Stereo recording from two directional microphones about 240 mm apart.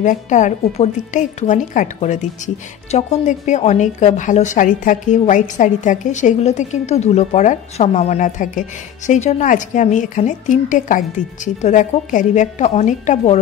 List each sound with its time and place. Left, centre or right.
0.0 s a woman's voice: left